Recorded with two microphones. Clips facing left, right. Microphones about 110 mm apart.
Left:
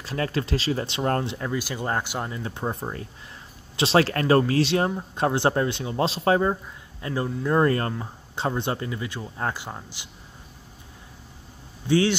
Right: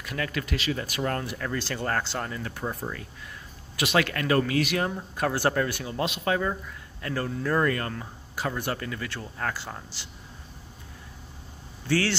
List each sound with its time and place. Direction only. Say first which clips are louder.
0.0 s speech: left 4 dB; 30° left (ahead or behind)
1.5 s speech: even; 10° left (ahead or behind)
11.9 s speech: left 5 dB; 20° left (ahead or behind)